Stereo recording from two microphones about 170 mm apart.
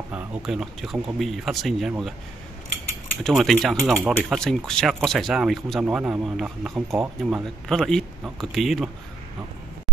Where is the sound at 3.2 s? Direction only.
Centre (ahead or behind).